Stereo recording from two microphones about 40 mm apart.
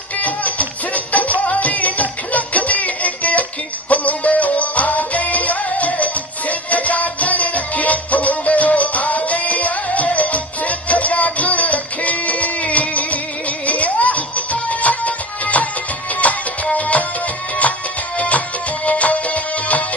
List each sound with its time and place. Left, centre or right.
0.2 s music: left
16.7 s music: left